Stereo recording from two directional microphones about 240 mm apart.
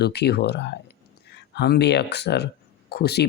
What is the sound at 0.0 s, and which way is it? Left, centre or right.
Speech, left.